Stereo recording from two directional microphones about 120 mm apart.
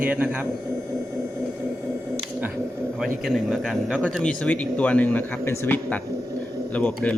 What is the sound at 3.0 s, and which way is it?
Speech, centre (ahead or behind).